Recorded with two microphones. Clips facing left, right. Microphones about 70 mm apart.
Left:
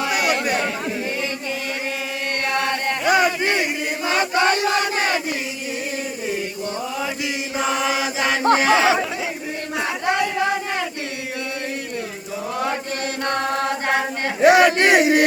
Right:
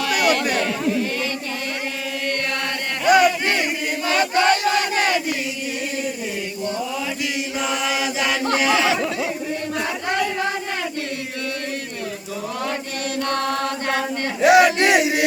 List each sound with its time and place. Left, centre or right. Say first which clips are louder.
0.0 s chatter: right 1 dB; centre
2.6 s chant: left 4 dB; left
4.1 s battle cry: right 1 dB; left
7.6 s chant: left 3 dB; left
14.4 s a sound: even; left